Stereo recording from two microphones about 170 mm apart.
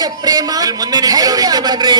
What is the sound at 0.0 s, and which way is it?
A man's voice, 25° right (ahead or behind).